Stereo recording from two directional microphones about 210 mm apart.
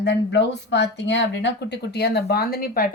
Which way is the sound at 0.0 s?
55° left (ahead or behind).